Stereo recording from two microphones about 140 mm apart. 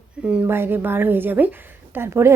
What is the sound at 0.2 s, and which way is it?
A woman's voice, 10° right (ahead or behind).